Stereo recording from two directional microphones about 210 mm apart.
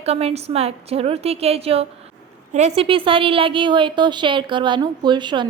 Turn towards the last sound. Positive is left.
turn(degrees=-20)  # may be behind; listen again after turning